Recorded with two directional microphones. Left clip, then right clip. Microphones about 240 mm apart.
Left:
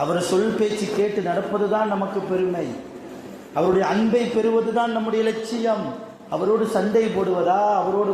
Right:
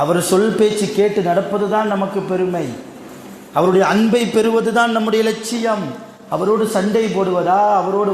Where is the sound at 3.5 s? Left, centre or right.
Right.